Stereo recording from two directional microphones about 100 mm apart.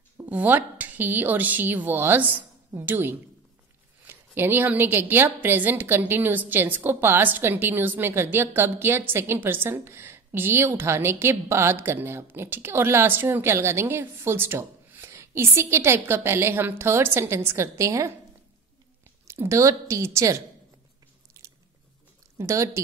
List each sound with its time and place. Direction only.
0.2 s a woman's voice: 20° right (ahead or behind)
19.2 s a woman's voice: 25° right (ahead or behind)
21.4 s biting: 30° right (ahead or behind)
22.4 s speech: 30° right (ahead or behind)